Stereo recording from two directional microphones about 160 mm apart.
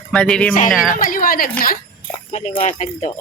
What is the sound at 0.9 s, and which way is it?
Speech, 60° left (ahead or behind).